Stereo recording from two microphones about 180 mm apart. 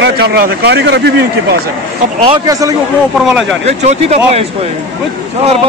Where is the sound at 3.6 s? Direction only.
35° right (ahead or behind).